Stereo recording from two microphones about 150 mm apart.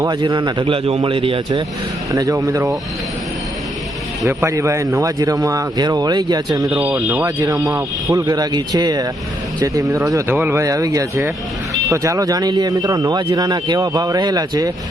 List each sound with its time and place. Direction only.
0.0 s a man's voice: 30° right (ahead or behind)
2.1 s speech: 25° right (ahead or behind)
4.3 s speech: 20° right (ahead or behind)